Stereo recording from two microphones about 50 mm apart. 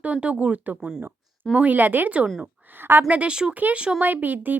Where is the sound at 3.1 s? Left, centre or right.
Right.